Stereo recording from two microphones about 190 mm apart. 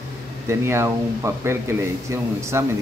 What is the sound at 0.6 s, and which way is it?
Speech, 15° right (ahead or behind).